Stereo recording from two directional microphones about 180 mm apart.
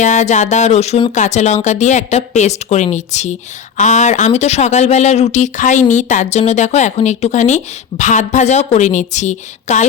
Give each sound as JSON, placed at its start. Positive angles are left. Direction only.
{"t": 0.0, "sound": "speech", "side_deg": 40}